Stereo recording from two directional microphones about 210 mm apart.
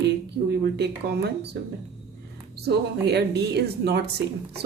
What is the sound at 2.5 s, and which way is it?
A woman's voice, 50° right (ahead or behind).